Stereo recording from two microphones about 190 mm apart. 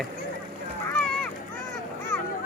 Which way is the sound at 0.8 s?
5° left (ahead or behind).